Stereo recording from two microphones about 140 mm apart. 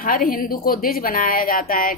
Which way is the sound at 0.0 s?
85° left.